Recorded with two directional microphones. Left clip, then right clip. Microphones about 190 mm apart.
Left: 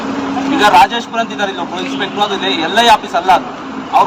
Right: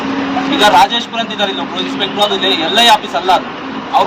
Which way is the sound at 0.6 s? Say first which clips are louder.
Even; 10° right (ahead or behind).